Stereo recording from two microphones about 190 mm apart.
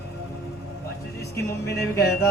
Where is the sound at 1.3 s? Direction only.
60° left (ahead or behind).